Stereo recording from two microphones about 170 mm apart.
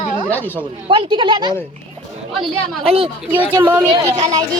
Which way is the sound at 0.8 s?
30° right (ahead or behind).